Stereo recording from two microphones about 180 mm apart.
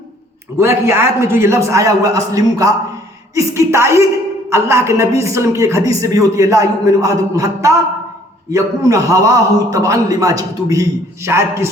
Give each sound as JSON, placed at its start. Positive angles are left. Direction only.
{"t": 0.5, "sound": "a man's voice", "side_deg": -15}